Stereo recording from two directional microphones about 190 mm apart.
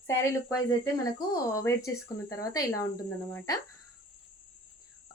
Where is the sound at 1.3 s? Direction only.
15° left (ahead or behind).